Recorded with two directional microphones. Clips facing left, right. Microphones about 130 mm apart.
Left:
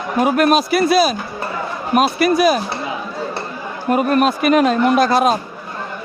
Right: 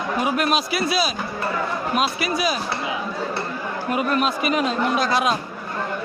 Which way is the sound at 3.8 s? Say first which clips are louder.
Left 7 dB; 50° left (ahead or behind).